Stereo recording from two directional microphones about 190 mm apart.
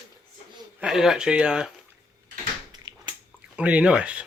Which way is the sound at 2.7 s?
25° right (ahead or behind).